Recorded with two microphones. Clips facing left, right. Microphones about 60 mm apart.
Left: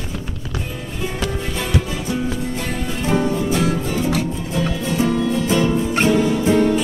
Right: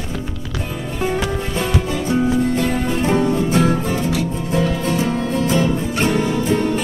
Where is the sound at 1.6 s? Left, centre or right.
Right.